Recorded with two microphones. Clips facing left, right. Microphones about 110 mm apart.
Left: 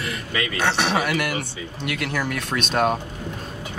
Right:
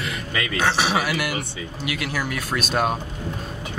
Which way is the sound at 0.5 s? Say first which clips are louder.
Right 1 dB; centre (ahead or behind).